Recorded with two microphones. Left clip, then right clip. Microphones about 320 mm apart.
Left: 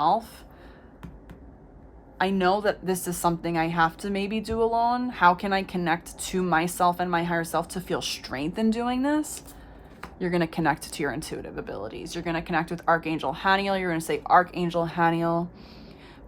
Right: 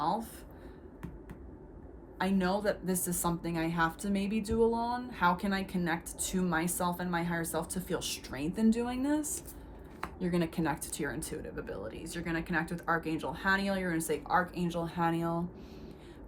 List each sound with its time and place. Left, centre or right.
2.1 s speech: centre
10.2 s speech: centre